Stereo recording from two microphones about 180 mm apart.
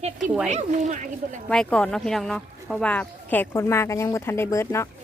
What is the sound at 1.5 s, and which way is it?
Speech, 5° left (ahead or behind).